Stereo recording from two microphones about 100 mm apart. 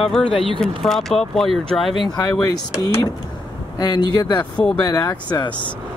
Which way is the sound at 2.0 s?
45° left (ahead or behind).